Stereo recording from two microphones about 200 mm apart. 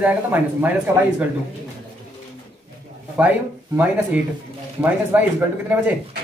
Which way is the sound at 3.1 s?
10° right (ahead or behind).